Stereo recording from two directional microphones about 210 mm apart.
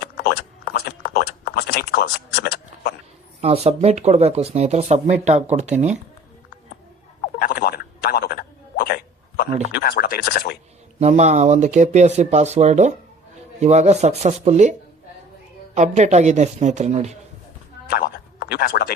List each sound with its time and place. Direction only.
0.0 s a sound: 45° left (ahead or behind)
3.4 s speech: 30° right (ahead or behind)
7.4 s a sound: 45° left (ahead or behind)
9.6 s speech: 45° left (ahead or behind)
11.0 s speech: 35° right (ahead or behind)
17.8 s plop: 45° left (ahead or behind)